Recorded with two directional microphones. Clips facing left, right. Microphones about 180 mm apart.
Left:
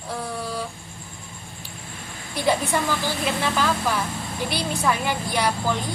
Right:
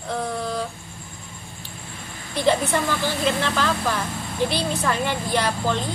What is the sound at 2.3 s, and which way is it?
A woman's voice, 10° left (ahead or behind).